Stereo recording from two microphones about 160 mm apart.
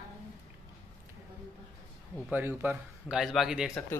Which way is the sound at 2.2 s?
10° right (ahead or behind).